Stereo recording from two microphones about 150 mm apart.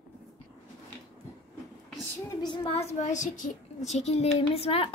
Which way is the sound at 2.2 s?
30° left (ahead or behind).